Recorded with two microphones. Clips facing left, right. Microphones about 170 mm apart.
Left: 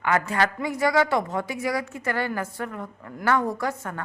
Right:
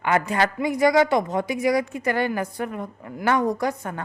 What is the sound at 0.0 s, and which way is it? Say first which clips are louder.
A woman's voice: right 2 dB; 20° right (ahead or behind).